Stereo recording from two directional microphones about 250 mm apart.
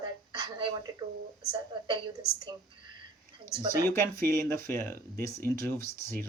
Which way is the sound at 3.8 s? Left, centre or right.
Centre.